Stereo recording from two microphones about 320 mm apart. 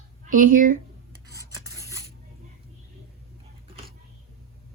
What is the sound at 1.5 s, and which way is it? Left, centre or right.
Filing, centre.